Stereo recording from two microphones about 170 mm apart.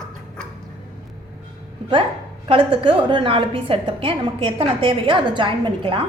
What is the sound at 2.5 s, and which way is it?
A woman's voice, 30° right (ahead or behind).